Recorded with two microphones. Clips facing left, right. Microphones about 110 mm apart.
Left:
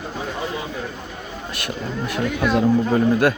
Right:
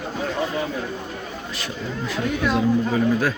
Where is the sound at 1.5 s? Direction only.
60° left (ahead or behind).